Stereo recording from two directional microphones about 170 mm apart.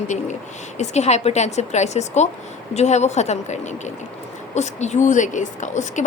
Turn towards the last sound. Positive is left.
turn(degrees=45)  # may be behind; listen again after turning